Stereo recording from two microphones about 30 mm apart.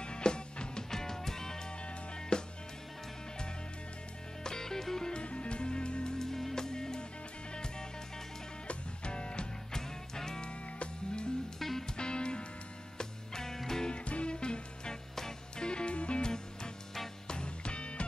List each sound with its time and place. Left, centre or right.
0.0 s music: left
0.8 s music: centre
2.1 s music: left
4.4 s music: left
5.2 s music: left
6.1 s music: centre
8.6 s music: left
9.7 s music: centre
10.4 s music: left
11.6 s music: centre
12.0 s music: left
12.9 s music: centre
13.8 s music: left
16.2 s music: left